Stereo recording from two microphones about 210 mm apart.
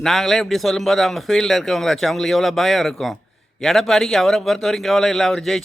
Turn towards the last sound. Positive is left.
turn(degrees=0)  # may be behind; listen again after turning